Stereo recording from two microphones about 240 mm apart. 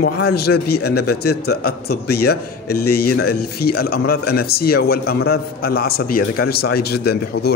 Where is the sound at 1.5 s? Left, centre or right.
Left.